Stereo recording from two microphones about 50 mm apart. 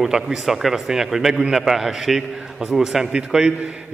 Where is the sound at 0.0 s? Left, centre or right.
Centre.